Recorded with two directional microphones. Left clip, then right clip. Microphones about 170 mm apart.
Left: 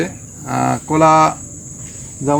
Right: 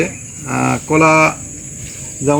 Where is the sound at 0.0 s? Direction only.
Centre (ahead or behind).